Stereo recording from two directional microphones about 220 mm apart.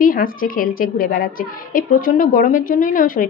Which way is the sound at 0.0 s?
40° left (ahead or behind).